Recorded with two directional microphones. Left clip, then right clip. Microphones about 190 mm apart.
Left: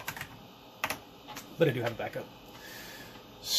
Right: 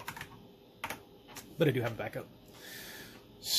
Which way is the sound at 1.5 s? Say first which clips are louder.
Left 2 dB; 55° right (ahead or behind).